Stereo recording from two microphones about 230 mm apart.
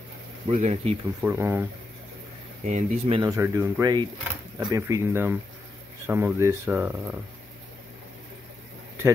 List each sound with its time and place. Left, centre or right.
0.5 s speech: right
1.2 s speech: centre
2.6 s speech: right
3.2 s speech: centre